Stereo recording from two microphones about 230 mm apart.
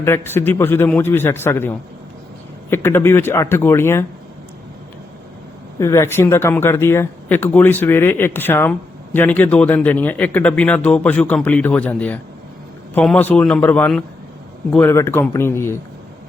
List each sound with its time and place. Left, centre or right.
0.0 s a man's voice: centre
5.8 s a man's voice: centre